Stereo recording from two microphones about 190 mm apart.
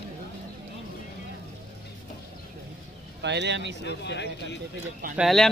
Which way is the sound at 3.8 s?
65° left (ahead or behind).